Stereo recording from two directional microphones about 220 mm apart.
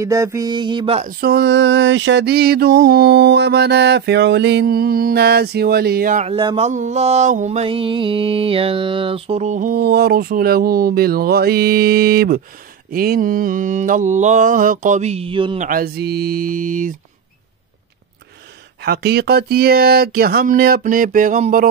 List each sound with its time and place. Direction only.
0.0 s music: 15° right (ahead or behind)
1.2 s mantra: 50° right (ahead or behind); by 15.6 s 25° right (ahead or behind)
15.6 s mantra: 40° right (ahead or behind)
18.8 s mantra: 45° right (ahead or behind)